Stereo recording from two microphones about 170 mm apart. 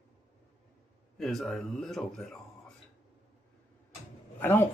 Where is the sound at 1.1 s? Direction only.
Centre (ahead or behind).